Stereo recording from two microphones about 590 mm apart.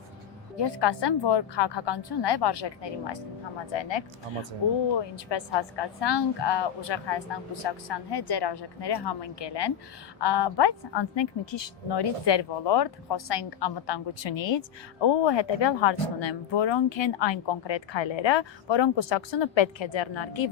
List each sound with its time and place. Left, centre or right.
0.6 s a woman's voice: left